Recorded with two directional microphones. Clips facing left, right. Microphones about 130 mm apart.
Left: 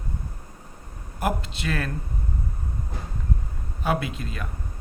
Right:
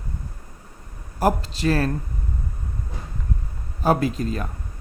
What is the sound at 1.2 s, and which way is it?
Speech, 35° right (ahead or behind).